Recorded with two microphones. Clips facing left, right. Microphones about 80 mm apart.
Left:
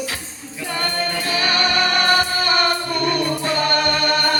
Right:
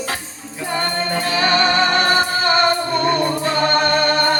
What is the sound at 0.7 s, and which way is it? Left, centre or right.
Music, right.